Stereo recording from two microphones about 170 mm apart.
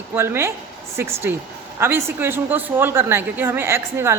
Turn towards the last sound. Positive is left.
turn(degrees=-15)  # may be behind; listen again after turning